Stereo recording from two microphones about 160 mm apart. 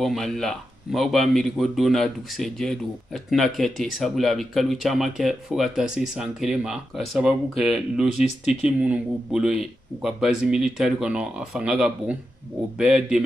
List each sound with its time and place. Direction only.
0.0 s speech: centre (ahead or behind)